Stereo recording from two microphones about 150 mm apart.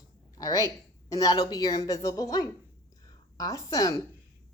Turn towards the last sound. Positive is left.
turn(degrees=20)  # may be behind; listen again after turning